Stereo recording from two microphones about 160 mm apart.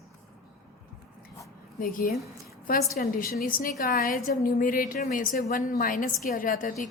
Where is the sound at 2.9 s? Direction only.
70° left (ahead or behind); by 6.8 s 55° left (ahead or behind).